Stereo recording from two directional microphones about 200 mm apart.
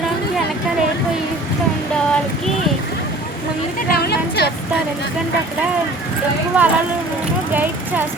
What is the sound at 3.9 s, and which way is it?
Speech, 50° left (ahead or behind).